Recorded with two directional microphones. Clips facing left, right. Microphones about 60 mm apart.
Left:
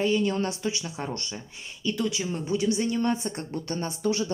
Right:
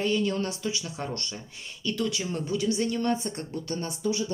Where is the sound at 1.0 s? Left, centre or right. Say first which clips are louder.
Left 1 dB; centre.